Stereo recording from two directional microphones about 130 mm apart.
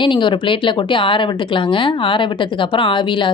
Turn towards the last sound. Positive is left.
turn(degrees=40)  # may be behind; listen again after turning